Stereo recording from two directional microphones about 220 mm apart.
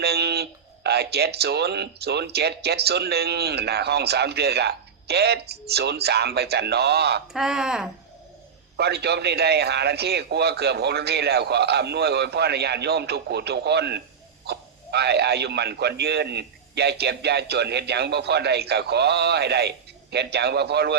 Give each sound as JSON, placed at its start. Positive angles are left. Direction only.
{"t": 0.0, "sound": "a sound", "side_deg": -45}
{"t": 0.9, "sound": "speech", "side_deg": -45}
{"t": 7.3, "sound": "speech", "side_deg": 0}
{"t": 8.7, "sound": "speech", "side_deg": -50}